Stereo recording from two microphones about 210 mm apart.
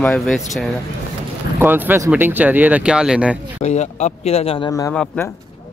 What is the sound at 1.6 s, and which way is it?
Speech, 10° right (ahead or behind).